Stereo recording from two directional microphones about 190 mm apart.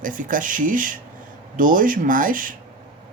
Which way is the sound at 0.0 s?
45° right (ahead or behind).